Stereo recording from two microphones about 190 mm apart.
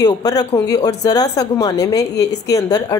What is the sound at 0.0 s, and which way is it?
Speech, 20° left (ahead or behind).